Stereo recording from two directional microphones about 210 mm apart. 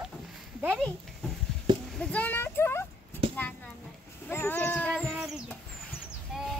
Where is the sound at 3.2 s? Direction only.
25° right (ahead or behind).